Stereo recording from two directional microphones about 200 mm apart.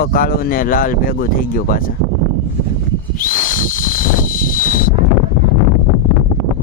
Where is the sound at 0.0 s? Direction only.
45° left (ahead or behind).